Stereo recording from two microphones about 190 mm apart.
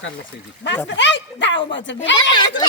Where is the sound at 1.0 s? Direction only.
70° left (ahead or behind).